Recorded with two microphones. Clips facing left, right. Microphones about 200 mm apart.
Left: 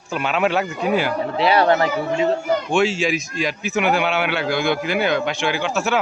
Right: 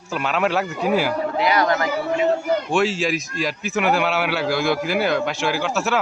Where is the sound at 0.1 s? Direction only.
Centre (ahead or behind).